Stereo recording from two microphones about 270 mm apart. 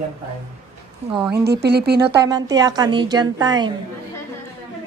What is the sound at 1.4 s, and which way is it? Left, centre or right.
Speech, right.